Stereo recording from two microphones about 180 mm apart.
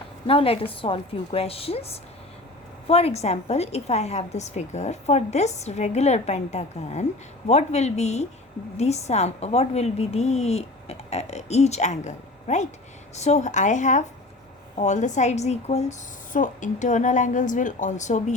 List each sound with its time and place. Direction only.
0.3 s a woman's voice: 30° left (ahead or behind)